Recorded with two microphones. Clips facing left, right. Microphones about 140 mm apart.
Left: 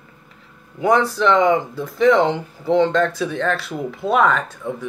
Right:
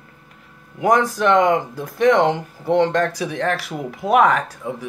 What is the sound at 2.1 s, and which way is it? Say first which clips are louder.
Speech: even; 15° right (ahead or behind).